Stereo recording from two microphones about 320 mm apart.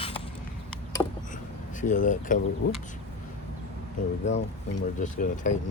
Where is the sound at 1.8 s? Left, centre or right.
Left.